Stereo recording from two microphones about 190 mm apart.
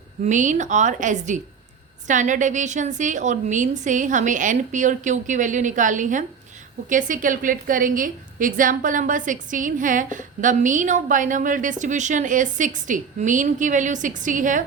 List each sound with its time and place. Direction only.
0.3 s a woman's voice: 40° right (ahead or behind)